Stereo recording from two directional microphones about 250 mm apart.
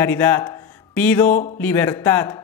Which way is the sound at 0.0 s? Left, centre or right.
Centre.